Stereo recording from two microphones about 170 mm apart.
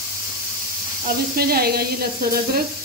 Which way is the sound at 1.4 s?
65° right (ahead or behind).